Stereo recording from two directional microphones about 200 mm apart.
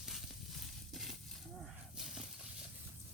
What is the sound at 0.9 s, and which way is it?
Livestock, centre (ahead or behind).